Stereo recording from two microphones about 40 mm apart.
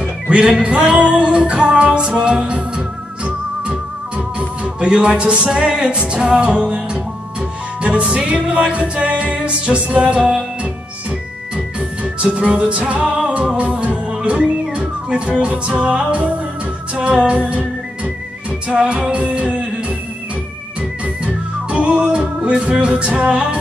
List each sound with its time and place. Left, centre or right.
0.0 s music: right
4.4 s music: right
21.0 s music: right